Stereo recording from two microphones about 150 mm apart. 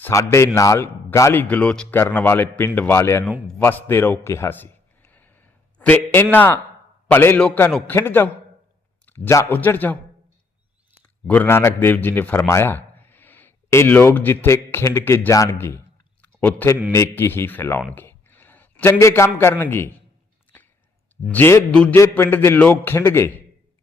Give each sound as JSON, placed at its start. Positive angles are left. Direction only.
{"t": 0.0, "sound": "a man's voice", "side_deg": 20}
{"t": 3.6, "sound": "a sound", "side_deg": 15}
{"t": 6.3, "sound": "a man's voice", "side_deg": 10}
{"t": 11.3, "sound": "a man's voice", "side_deg": 15}
{"t": 16.2, "sound": "a sound", "side_deg": 10}
{"t": 16.9, "sound": "speech", "side_deg": 20}
{"t": 21.2, "sound": "a man's voice", "side_deg": 15}